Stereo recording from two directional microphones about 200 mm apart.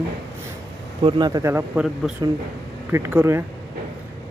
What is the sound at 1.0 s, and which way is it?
Speech, 20° right (ahead or behind).